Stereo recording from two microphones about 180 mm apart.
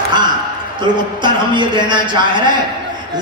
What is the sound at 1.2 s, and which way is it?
Speech, 25° right (ahead or behind).